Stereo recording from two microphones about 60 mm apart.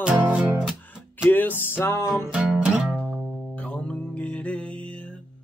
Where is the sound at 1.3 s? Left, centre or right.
Left.